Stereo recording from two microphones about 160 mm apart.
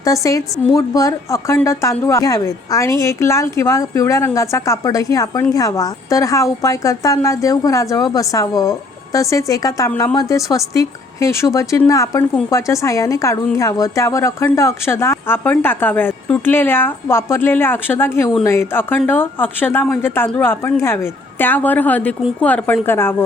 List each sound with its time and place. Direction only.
0.0 s a woman's voice: 20° left (ahead or behind)